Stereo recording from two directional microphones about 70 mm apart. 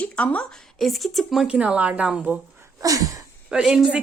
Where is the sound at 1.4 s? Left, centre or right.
Centre.